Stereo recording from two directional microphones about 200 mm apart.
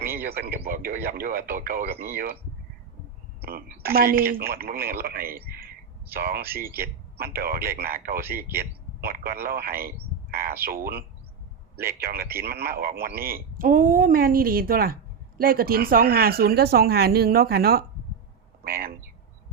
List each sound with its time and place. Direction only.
0.3 s speech: 50° right (ahead or behind)
3.4 s speech: 50° right (ahead or behind)